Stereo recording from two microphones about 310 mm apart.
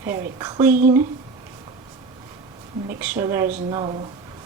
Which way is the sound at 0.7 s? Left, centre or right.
Right.